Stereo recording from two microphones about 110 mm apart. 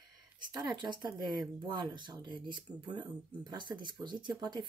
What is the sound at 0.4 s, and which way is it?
Speech, 40° right (ahead or behind).